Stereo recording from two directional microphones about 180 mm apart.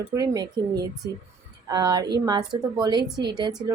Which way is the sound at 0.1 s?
20° right (ahead or behind).